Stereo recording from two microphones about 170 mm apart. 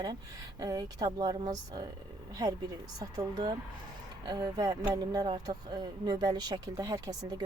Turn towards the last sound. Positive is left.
turn(degrees=-20)  # may be behind; listen again after turning